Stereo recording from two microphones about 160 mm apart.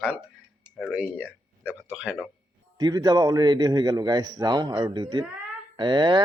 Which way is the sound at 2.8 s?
25° right (ahead or behind).